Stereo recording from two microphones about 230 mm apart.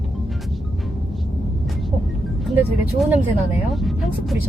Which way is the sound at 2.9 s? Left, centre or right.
Centre.